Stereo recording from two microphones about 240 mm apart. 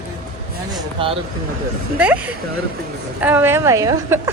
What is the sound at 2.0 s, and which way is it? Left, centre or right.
A woman's voice, centre.